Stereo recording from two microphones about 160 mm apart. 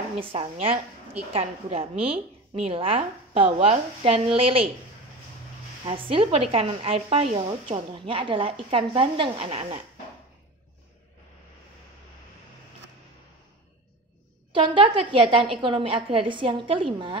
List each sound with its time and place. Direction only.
0.2 s a woman's voice: 35° right (ahead or behind)
5.9 s a woman's voice: 35° right (ahead or behind)
14.5 s a woman's voice: 30° right (ahead or behind)